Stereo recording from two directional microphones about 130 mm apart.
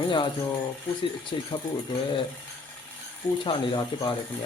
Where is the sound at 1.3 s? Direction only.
45° left (ahead or behind).